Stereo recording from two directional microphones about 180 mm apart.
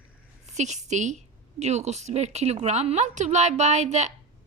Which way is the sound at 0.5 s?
40° right (ahead or behind).